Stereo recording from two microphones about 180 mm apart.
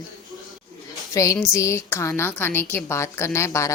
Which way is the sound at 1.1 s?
15° left (ahead or behind).